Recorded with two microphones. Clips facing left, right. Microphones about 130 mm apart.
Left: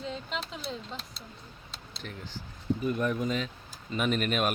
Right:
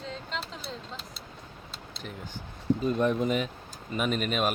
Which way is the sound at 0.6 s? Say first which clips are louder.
Left 2 dB; 5° right (ahead or behind).